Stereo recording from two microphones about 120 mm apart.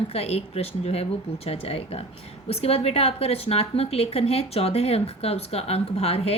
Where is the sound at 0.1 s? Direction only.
60° left (ahead or behind).